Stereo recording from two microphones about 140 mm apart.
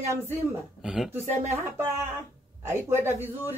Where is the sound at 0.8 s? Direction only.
5° right (ahead or behind).